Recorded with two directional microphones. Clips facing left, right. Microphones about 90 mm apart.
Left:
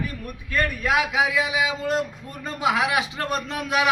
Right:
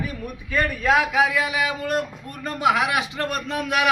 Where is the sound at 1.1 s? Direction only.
20° left (ahead or behind).